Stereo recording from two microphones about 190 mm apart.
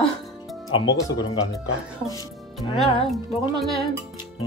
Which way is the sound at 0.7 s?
20° left (ahead or behind).